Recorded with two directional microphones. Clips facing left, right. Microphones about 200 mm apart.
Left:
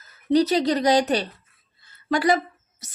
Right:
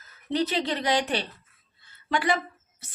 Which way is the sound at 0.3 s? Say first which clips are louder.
Left 7 dB; 40° left (ahead or behind).